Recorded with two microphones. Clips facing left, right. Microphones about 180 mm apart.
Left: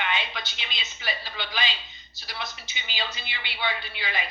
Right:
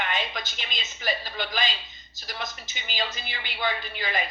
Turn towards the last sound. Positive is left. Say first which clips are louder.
# right 3 dB
turn(degrees=-45)  # may be behind; listen again after turning